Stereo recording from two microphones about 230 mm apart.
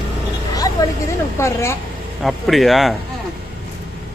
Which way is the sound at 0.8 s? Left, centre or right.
Centre.